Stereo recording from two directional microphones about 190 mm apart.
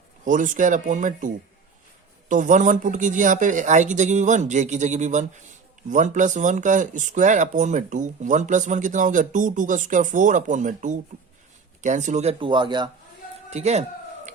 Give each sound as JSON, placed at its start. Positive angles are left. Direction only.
{"t": 0.3, "sound": "speech", "side_deg": -40}
{"t": 2.3, "sound": "speech", "side_deg": -40}
{"t": 13.5, "sound": "speech", "side_deg": -35}